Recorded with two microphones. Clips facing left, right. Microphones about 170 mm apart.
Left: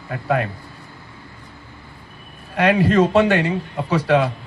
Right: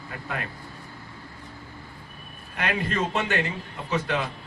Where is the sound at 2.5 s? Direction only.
90° left.